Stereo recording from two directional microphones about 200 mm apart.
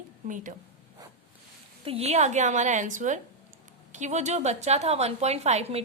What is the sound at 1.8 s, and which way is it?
A woman's voice, 30° right (ahead or behind).